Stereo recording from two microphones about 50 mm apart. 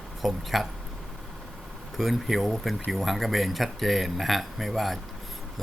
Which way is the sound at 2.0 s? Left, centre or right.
Centre.